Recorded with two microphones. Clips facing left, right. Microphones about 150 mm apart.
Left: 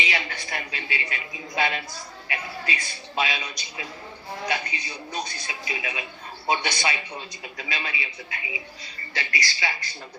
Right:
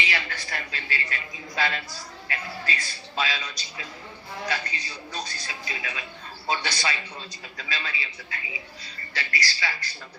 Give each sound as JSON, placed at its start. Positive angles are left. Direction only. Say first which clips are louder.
{"t": 0.0, "sound": "a man's voice", "louder": "left 1 dB", "side_deg": 20}